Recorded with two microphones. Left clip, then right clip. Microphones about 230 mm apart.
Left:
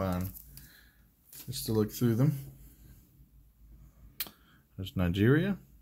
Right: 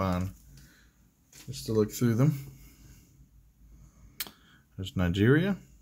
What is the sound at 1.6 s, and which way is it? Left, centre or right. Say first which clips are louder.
Speech: right 3 dB; centre.